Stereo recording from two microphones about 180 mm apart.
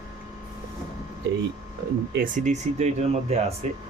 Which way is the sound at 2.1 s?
45° right (ahead or behind).